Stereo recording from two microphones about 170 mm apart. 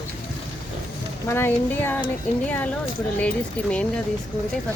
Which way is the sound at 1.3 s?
15° left (ahead or behind).